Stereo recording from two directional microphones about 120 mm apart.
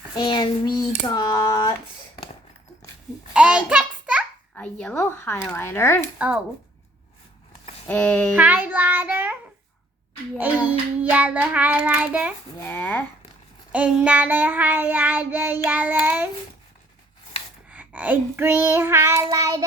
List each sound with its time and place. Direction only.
0.2 s child singing: 40° left (ahead or behind)
3.3 s a sound: 10° right (ahead or behind)
4.5 s speech: 10° left (ahead or behind)
6.1 s child singing: 10° right (ahead or behind)
7.9 s speech: 15° left (ahead or behind)
8.4 s child singing: 15° right (ahead or behind)
12.5 s speech: 15° left (ahead or behind)
13.7 s child singing: 10° right (ahead or behind)
17.7 s child singing: 15° right (ahead or behind); by 19.6 s 30° right (ahead or behind)